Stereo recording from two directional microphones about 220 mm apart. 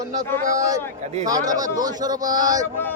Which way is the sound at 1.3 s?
15° right (ahead or behind).